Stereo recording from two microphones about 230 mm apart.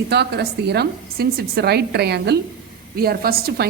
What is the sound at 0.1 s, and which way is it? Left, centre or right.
A woman's voice, right.